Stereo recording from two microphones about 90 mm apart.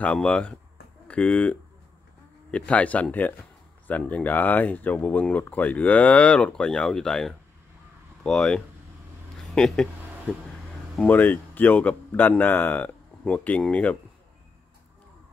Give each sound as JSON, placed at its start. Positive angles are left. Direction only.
{"t": 0.0, "sound": "speech", "side_deg": 10}
{"t": 11.1, "sound": "speech", "side_deg": 20}